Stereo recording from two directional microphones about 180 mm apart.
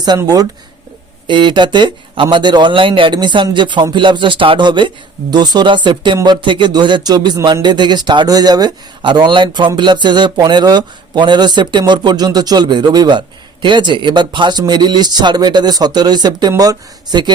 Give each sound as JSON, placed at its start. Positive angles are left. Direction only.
{"t": 0.0, "sound": "speech", "side_deg": -20}